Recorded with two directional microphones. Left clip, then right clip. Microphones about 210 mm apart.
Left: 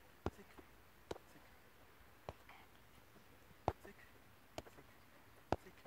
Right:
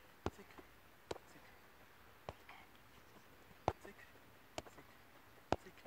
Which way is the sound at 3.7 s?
20° right (ahead or behind).